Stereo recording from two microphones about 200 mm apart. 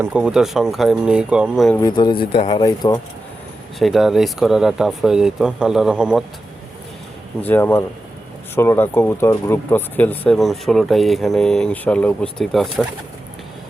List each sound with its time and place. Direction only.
0.0 s speech: 5° right (ahead or behind)
1.7 s speech: 20° left (ahead or behind)
3.8 s speech: centre (ahead or behind)
7.4 s speech: 10° left (ahead or behind)